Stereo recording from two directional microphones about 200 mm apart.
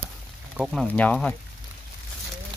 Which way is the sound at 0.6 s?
5° left (ahead or behind).